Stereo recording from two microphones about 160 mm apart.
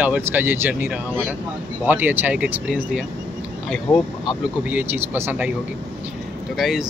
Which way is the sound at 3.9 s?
25° left (ahead or behind).